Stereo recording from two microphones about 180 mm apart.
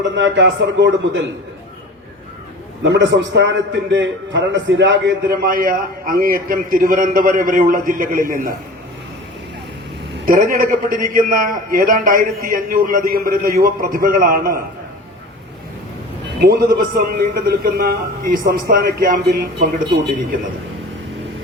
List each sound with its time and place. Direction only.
0.2 s a man's voice: 85° right
2.8 s a man's voice: 90° right
5.4 s a man's voice: 55° right (ahead or behind)
10.2 s a man's voice: 50° right (ahead or behind)
16.4 s a man's voice: 55° right (ahead or behind)